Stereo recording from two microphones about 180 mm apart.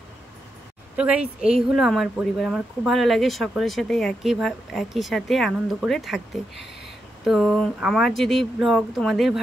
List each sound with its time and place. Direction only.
0.9 s speech: 5° right (ahead or behind)
7.2 s speech: centre (ahead or behind)